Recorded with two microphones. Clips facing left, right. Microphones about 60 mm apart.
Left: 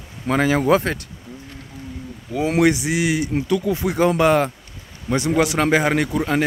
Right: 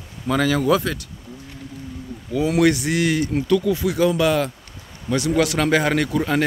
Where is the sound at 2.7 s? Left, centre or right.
Centre.